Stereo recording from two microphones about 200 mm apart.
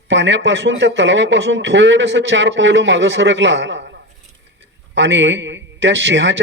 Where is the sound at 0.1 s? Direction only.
65° right (ahead or behind).